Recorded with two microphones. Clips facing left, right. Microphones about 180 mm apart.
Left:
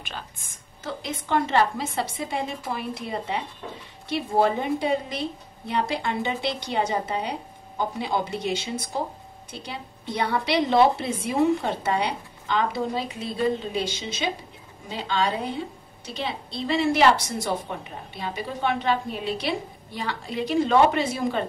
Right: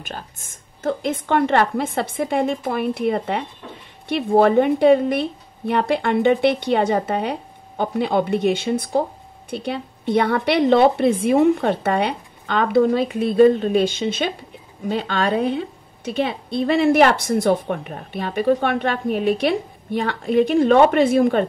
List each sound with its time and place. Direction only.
0.0 s a woman's voice: 45° right (ahead or behind)